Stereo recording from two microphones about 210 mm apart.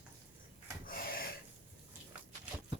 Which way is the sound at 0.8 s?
45° left (ahead or behind).